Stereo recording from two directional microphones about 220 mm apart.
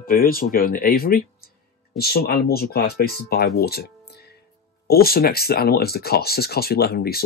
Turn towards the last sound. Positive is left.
turn(degrees=45)  # may be behind; listen again after turning